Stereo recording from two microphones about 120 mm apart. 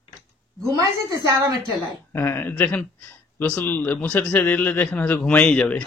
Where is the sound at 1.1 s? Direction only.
25° right (ahead or behind).